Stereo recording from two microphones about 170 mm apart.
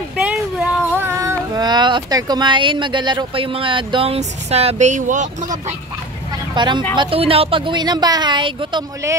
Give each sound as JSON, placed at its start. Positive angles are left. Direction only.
{"t": 0.2, "sound": "speech", "side_deg": -5}
{"t": 6.5, "sound": "speech", "side_deg": -25}